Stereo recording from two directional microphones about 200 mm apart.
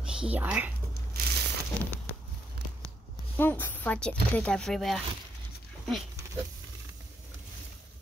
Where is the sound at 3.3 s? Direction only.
10° left (ahead or behind).